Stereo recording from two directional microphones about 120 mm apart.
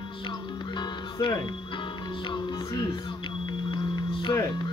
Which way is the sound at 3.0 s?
40° left (ahead or behind).